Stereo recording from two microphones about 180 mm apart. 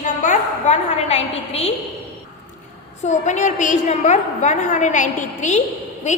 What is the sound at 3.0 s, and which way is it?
A woman's voice, 40° left (ahead or behind).